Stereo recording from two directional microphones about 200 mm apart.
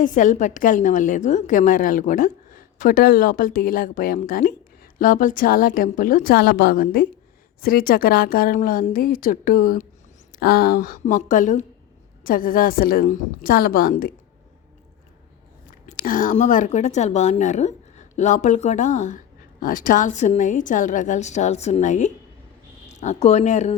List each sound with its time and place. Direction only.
0.0 s a woman's voice: 40° left (ahead or behind)
15.9 s a woman's voice: 45° left (ahead or behind)